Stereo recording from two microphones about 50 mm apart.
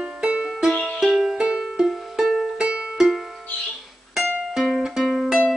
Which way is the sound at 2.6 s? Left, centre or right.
Centre.